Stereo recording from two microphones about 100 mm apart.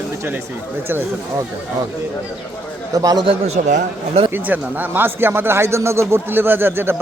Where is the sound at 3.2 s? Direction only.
65° right (ahead or behind).